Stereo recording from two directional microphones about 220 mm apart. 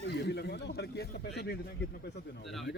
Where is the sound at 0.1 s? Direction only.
50° left (ahead or behind).